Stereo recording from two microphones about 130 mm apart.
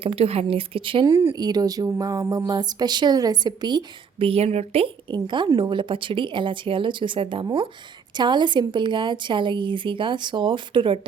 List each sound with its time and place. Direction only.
0.0 s a woman's voice: 50° right (ahead or behind)
1.4 s speech: 30° right (ahead or behind)
4.3 s a woman's voice: 50° right (ahead or behind)
5.1 s speech: 35° right (ahead or behind)